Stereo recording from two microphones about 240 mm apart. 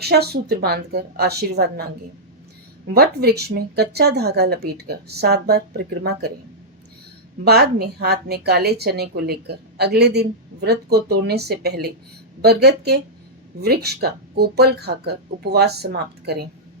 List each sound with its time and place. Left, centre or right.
0.0 s a woman's voice: right
2.9 s a woman's voice: right
7.4 s a woman's voice: right